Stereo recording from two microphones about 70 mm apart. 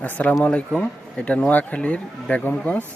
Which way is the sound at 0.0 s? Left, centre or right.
Centre.